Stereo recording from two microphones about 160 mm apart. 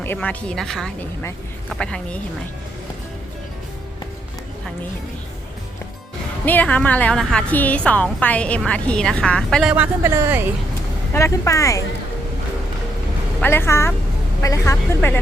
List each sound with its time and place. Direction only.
0.0 s speech: 10° left (ahead or behind)
6.4 s a woman's voice: 10° left (ahead or behind); by 10.5 s 15° right (ahead or behind)
11.1 s speech: 20° left (ahead or behind)
13.4 s a woman's voice: 15° left (ahead or behind)